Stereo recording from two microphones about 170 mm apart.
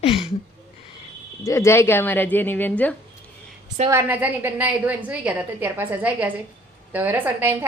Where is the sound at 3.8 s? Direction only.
15° right (ahead or behind).